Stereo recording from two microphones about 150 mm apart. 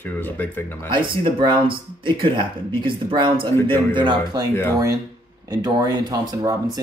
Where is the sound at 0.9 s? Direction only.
30° right (ahead or behind).